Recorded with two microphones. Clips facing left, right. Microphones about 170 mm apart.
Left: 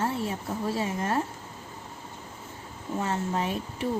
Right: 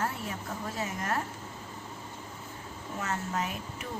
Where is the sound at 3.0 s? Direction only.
30° left (ahead or behind).